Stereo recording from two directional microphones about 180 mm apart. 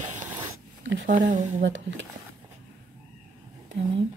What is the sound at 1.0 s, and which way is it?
Speech, 45° right (ahead or behind).